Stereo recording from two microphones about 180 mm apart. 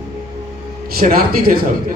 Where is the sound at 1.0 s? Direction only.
55° right (ahead or behind).